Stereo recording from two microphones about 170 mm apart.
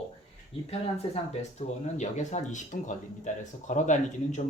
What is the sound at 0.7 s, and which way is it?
Speech, 40° left (ahead or behind).